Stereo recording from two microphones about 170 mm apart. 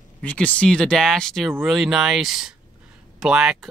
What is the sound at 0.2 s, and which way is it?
Speech, 10° left (ahead or behind).